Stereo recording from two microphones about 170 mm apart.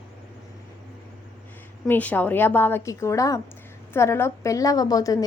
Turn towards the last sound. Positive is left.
turn(degrees=20)  # may be behind; listen again after turning